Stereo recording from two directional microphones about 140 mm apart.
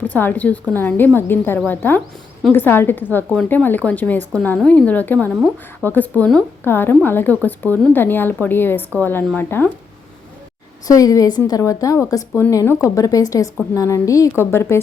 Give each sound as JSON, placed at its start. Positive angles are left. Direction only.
{"t": 0.1, "sound": "a woman's voice", "side_deg": 10}
{"t": 10.8, "sound": "a woman's voice", "side_deg": 25}